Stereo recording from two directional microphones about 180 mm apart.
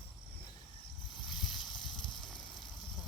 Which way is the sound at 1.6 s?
25° left (ahead or behind).